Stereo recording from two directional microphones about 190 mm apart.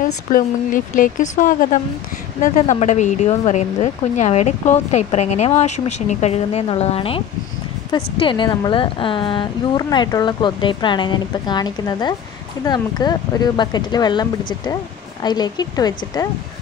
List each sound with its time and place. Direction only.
0.0 s a woman's voice: 45° left (ahead or behind); by 14.2 s 20° left (ahead or behind)
15.2 s a woman's voice: 20° left (ahead or behind)